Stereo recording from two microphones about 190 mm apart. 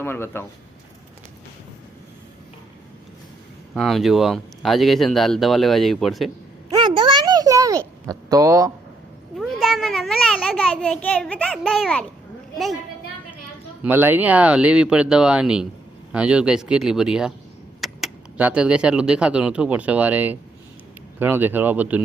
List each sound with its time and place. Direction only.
0.0 s speech: 10° left (ahead or behind)
3.8 s speech: centre (ahead or behind)
6.7 s a sound: 25° right (ahead or behind)
9.4 s a child's voice: centre (ahead or behind)
13.8 s speech: 10° right (ahead or behind)